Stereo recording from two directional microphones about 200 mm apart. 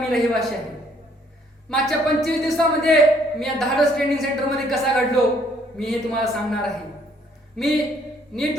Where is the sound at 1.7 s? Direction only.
Centre (ahead or behind).